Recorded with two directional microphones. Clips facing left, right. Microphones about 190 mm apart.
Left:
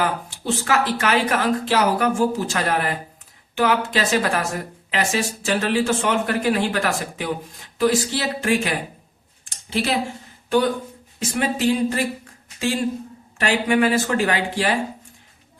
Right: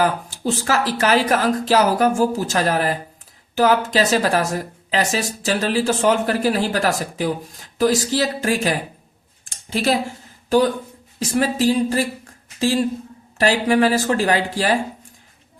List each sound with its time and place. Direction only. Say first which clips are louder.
0.0 s speech: right 4 dB; 40° right (ahead or behind)
9.4 s a sound: right 2 dB; 45° right (ahead or behind)
11.2 s speech: right 3 dB; 35° right (ahead or behind)